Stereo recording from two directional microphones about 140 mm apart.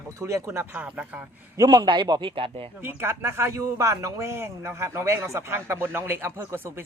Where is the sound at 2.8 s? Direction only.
15° right (ahead or behind).